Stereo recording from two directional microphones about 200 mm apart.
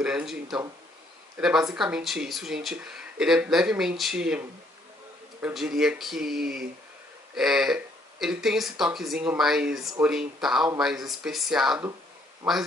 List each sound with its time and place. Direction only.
0.0 s speech: 5° right (ahead or behind)
1.7 s speech: 5° right (ahead or behind)
6.4 s speech: 50° right (ahead or behind)
7.3 s speech: centre (ahead or behind)